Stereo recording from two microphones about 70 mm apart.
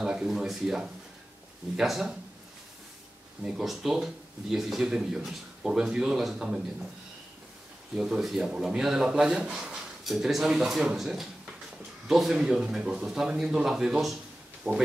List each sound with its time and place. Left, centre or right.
0.0 s speech: centre
3.4 s speech: centre
7.9 s speech: centre
14.7 s speech: centre